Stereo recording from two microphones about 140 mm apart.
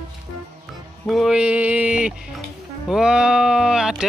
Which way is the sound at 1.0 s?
Centre (ahead or behind).